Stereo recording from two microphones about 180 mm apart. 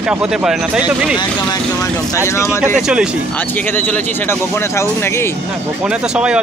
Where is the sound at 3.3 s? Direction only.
10° left (ahead or behind).